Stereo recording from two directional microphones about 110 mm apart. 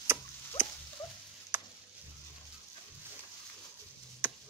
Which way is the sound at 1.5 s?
20° right (ahead or behind).